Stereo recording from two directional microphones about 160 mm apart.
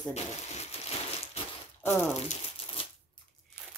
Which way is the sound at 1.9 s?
15° left (ahead or behind).